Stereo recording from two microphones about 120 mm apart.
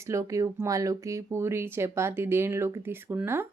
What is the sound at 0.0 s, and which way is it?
A woman's voice, 25° right (ahead or behind).